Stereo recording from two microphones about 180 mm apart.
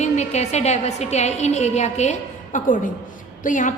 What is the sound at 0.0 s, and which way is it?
A woman's voice, 40° left (ahead or behind).